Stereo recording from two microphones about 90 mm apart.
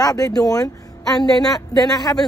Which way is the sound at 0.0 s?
45° left (ahead or behind).